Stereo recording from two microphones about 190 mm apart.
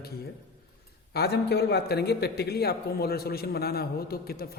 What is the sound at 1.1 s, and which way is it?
A man's voice, 55° left (ahead or behind).